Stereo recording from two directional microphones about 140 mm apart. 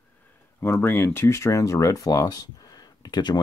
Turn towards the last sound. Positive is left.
turn(degrees=30)  # may be behind; listen again after turning